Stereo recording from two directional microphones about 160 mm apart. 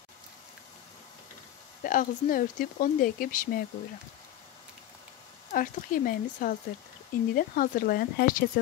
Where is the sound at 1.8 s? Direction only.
55° left (ahead or behind).